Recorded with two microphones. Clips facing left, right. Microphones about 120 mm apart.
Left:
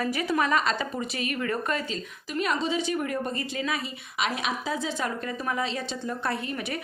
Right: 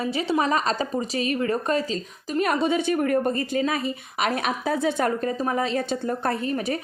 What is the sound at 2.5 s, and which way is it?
A woman's voice, 55° right (ahead or behind).